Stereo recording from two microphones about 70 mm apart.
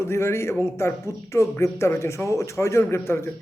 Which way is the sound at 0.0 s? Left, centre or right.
Left.